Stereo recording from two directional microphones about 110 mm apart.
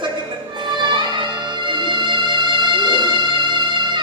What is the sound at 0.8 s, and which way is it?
Music, 45° right (ahead or behind).